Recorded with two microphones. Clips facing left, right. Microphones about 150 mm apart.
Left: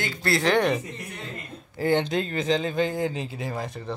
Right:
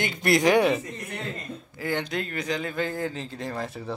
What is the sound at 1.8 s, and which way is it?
Speech, 25° left (ahead or behind).